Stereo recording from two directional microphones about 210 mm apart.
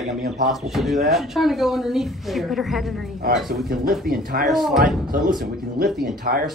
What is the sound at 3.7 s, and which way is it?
Speech, 45° right (ahead or behind).